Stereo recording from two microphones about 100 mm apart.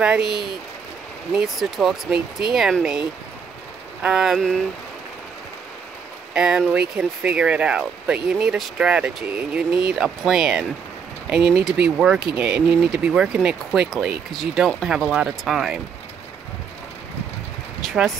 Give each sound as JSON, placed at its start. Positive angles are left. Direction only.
{"t": 0.0, "sound": "speech", "side_deg": -5}
{"t": 6.3, "sound": "speech", "side_deg": -5}
{"t": 17.8, "sound": "speech", "side_deg": 0}